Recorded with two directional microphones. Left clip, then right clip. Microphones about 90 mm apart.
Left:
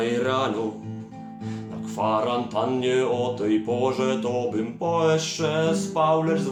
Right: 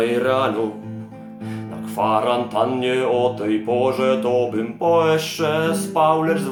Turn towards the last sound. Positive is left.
turn(degrees=-45)  # may be behind; listen again after turning